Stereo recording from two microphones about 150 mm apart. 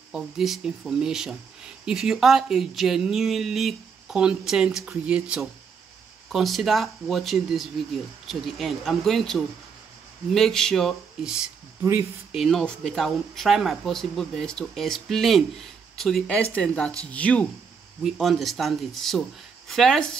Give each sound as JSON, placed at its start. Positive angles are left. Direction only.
{"t": 0.1, "sound": "speech", "side_deg": -5}
{"t": 11.8, "sound": "speech", "side_deg": -20}
{"t": 12.3, "sound": "speech", "side_deg": 0}